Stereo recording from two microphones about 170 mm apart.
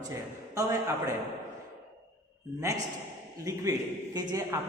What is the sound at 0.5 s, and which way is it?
Speech, 20° right (ahead or behind).